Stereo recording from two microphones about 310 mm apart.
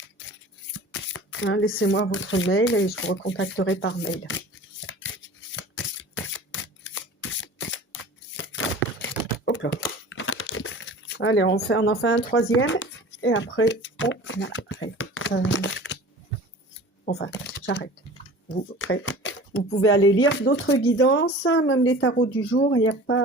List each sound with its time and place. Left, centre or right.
0.7 s speech: left
4.9 s a sound: left
10.1 s crumpling: left
12.5 s speech: left
17.1 s speech: left